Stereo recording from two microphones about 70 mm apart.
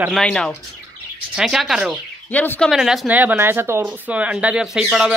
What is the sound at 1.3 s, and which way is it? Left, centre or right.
Speech, centre.